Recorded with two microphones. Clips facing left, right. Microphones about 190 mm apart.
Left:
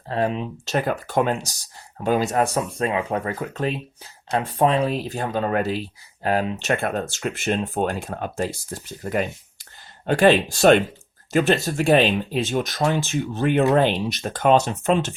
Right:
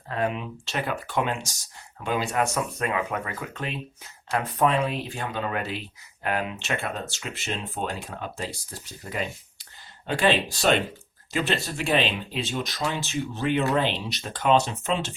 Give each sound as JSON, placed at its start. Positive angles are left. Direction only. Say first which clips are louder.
{"t": 0.1, "sound": "speech", "louder": "left 4 dB", "side_deg": 30}